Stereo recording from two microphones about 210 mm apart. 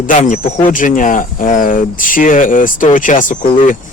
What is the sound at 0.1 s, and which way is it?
Speech, 35° left (ahead or behind).